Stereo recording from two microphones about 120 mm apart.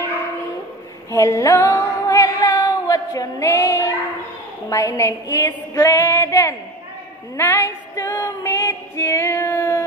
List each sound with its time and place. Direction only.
1.1 s female singing: 25° left (ahead or behind)